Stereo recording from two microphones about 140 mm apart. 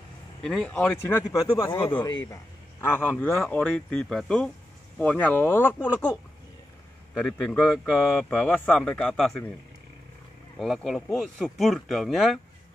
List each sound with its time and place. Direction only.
0.4 s a man's voice: 5° left (ahead or behind)
7.2 s speech: centre (ahead or behind)
8.3 s speech: 10° left (ahead or behind)
10.6 s speech: centre (ahead or behind)